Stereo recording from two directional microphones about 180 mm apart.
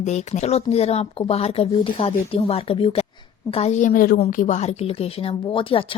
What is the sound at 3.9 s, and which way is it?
A woman's voice, 50° left (ahead or behind).